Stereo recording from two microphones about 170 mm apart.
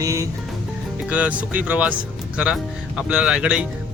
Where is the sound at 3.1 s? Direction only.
5° right (ahead or behind).